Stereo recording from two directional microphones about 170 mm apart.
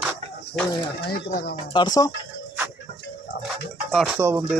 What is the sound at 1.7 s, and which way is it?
Speech, 25° left (ahead or behind).